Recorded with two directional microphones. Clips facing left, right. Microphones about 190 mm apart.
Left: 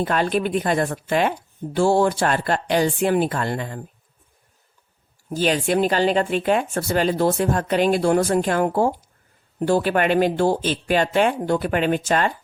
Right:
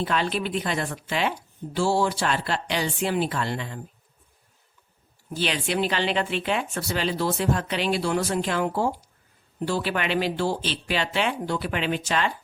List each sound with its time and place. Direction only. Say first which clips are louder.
0.0 s speech: left 5 dB; 50° left (ahead or behind)
5.3 s speech: left 7 dB; 45° left (ahead or behind)